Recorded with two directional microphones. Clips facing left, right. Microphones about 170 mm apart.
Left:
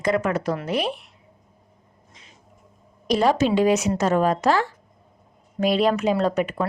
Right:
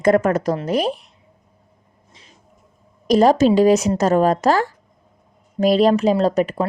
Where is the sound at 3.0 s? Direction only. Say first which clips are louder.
Right 6 dB; 40° right (ahead or behind).